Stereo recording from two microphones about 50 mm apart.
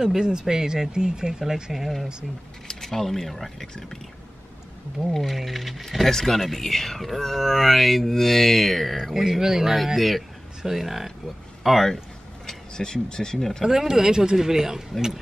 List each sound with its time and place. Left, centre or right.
0.0 s speech: centre
5.1 s speech: centre
13.7 s speech: centre